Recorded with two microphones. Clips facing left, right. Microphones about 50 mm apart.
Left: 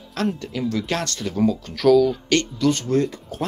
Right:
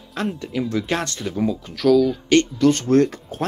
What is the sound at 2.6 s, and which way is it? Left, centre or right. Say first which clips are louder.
Speech: right 4 dB; right.